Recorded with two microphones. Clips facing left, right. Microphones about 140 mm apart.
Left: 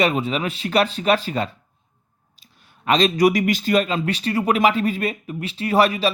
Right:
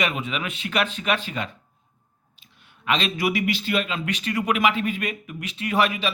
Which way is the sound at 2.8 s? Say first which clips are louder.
Left 8 dB; 40° left (ahead or behind).